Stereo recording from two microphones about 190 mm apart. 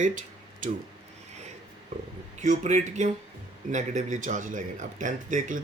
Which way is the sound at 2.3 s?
40° right (ahead or behind).